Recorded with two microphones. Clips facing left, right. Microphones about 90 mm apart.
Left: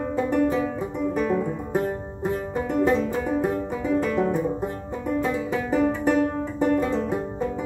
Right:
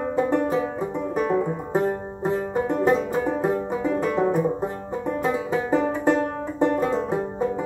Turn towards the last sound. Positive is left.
turn(degrees=-25)  # may be behind; listen again after turning